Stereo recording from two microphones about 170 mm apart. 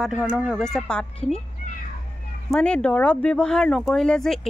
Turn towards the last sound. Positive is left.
turn(degrees=5)  # may be behind; listen again after turning